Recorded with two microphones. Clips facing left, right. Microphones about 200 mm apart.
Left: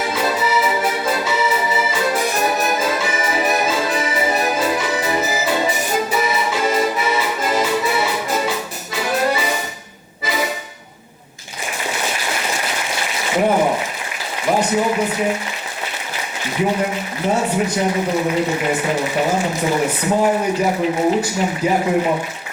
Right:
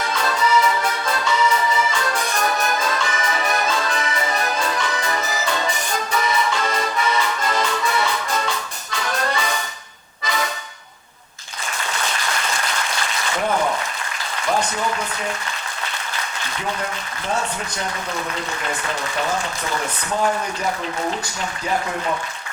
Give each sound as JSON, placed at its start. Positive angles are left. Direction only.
{"t": 0.0, "sound": "music", "side_deg": 5}
{"t": 11.9, "sound": "applause", "side_deg": 10}
{"t": 14.9, "sound": "speech", "side_deg": 15}
{"t": 16.6, "sound": "speech", "side_deg": 10}